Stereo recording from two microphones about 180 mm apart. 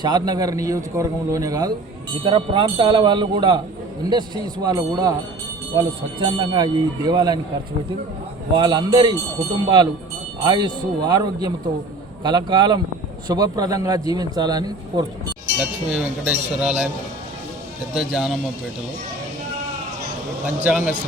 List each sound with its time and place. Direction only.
0.0 s speech: 25° right (ahead or behind)
4.6 s speech: 20° right (ahead or behind)
8.5 s speech: 25° right (ahead or behind)
15.9 s speech: 5° right (ahead or behind)
17.9 s speech: 5° right (ahead or behind)
20.7 s a man's voice: 10° right (ahead or behind)